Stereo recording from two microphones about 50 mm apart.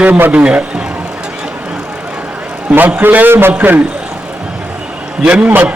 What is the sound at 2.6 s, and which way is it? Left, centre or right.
A man's voice, right.